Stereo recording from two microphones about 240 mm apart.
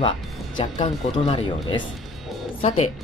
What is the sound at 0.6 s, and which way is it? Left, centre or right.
Speech, left.